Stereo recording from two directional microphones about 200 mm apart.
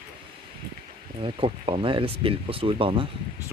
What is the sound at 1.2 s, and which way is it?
Speech, 25° right (ahead or behind).